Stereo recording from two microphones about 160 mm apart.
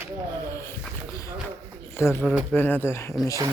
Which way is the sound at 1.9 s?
15° left (ahead or behind).